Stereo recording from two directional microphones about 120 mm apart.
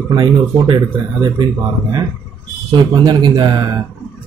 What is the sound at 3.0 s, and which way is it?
Speech, 35° right (ahead or behind).